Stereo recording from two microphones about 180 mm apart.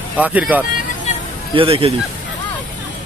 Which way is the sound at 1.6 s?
30° right (ahead or behind).